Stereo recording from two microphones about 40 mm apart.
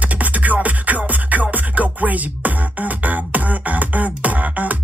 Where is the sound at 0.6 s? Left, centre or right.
Right.